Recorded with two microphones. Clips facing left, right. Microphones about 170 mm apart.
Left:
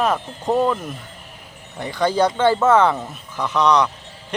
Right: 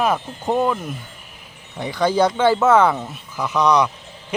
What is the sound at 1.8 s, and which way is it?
Speech, 10° right (ahead or behind).